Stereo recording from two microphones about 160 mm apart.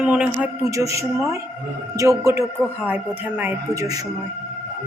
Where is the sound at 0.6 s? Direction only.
20° right (ahead or behind).